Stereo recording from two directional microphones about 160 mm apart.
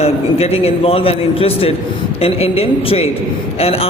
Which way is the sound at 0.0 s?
40° left (ahead or behind).